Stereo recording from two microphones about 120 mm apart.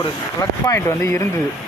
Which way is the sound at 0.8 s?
20° left (ahead or behind).